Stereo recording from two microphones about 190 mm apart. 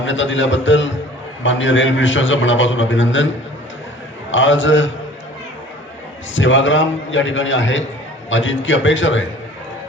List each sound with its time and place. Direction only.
0.0 s a man's voice: 80° left
4.3 s a man's voice: 80° left
6.3 s a man's voice: 80° left